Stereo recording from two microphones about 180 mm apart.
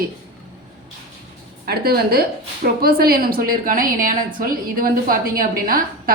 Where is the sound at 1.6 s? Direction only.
60° right (ahead or behind).